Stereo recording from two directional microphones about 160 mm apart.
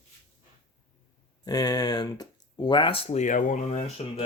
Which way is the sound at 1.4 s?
25° left (ahead or behind).